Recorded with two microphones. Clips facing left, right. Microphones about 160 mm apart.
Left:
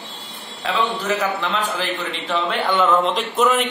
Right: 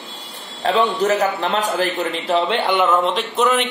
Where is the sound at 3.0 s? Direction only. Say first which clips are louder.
Even; centre (ahead or behind).